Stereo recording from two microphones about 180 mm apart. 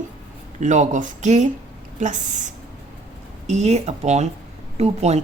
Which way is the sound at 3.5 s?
40° right (ahead or behind).